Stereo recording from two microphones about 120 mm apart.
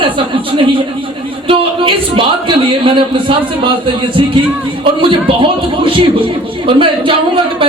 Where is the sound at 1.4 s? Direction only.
50° right (ahead or behind).